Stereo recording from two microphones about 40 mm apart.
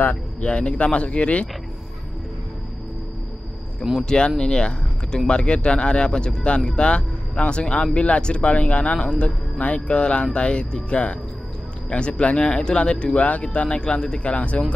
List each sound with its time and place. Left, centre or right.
0.4 s speech: left
4.0 s speech: centre
14.2 s speech: left